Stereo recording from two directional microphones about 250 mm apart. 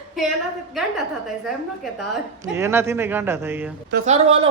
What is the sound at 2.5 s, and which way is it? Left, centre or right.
A man's voice, centre.